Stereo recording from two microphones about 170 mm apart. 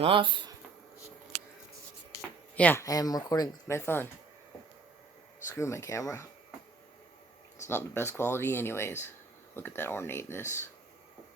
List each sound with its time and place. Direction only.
0.0 s speech: 30° right (ahead or behind)
2.6 s speech: 10° left (ahead or behind)
2.8 s speech: 20° left (ahead or behind)
5.5 s speech: 15° left (ahead or behind)
7.7 s speech: 15° left (ahead or behind)